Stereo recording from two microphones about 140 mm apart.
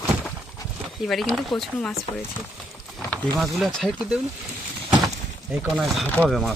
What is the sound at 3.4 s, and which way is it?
Speech, centre (ahead or behind).